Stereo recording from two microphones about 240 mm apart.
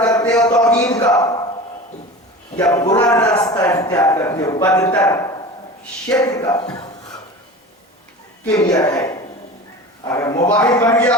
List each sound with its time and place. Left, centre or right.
0.0 s a sound: centre
0.7 s a man's voice: centre
2.6 s a man's voice: centre
8.7 s a man's voice: centre